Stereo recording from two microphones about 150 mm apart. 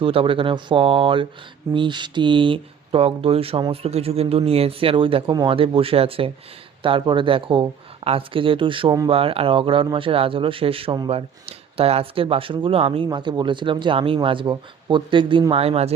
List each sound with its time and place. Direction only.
0.0 s speech: 35° right (ahead or behind)